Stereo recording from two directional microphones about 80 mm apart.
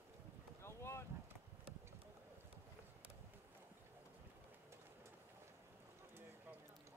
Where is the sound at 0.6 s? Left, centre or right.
Left.